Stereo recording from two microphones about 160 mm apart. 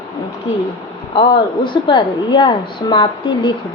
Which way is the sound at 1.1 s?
30° left (ahead or behind).